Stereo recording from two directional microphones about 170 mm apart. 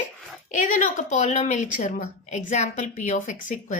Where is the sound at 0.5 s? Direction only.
50° left (ahead or behind).